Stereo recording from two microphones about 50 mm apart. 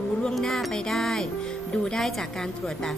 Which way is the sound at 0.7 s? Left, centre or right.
Centre.